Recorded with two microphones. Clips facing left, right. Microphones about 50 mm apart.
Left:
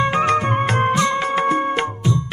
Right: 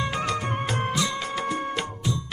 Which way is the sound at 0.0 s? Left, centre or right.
Left.